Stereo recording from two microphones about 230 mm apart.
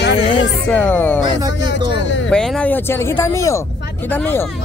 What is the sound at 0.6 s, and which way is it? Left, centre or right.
Speech, centre.